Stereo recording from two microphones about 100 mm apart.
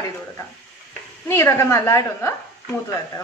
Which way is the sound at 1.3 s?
30° left (ahead or behind).